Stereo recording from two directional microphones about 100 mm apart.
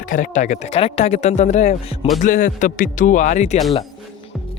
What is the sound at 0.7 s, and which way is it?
Speech, 90° left.